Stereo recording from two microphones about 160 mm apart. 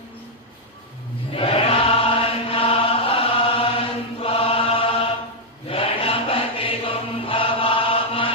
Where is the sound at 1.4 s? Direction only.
35° left (ahead or behind).